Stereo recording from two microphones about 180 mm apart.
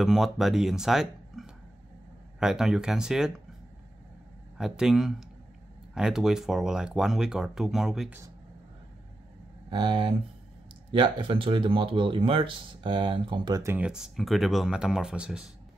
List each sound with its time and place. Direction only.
0.0 s speech: centre (ahead or behind)
4.6 s speech: 5° right (ahead or behind)
9.7 s speech: 25° right (ahead or behind); by 15.4 s 5° right (ahead or behind)